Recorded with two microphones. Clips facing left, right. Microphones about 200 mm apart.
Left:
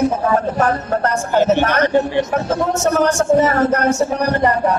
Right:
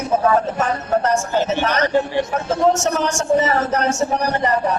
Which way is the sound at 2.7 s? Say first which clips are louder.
Left 5 dB; 60° left (ahead or behind).